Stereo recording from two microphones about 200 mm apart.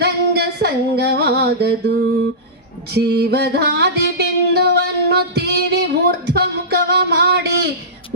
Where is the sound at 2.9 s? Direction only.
55° right (ahead or behind).